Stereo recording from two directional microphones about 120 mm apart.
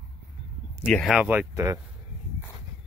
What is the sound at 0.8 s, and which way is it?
Speech, 5° left (ahead or behind).